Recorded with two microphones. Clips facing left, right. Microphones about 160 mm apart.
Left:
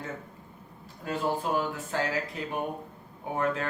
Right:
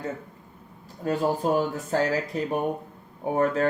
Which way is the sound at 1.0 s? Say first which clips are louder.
Right 6 dB; 40° right (ahead or behind).